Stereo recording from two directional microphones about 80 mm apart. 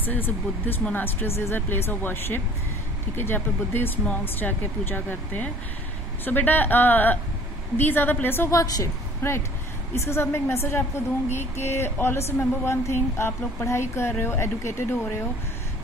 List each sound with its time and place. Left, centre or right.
0.0 s speech: left
8.5 s a woman's voice: left
9.2 s speech: left